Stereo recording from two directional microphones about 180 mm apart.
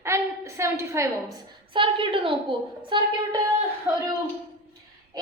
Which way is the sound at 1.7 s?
30° right (ahead or behind).